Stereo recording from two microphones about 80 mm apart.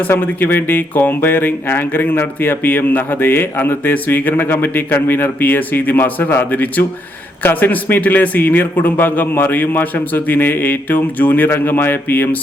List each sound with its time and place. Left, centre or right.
0.1 s speech: left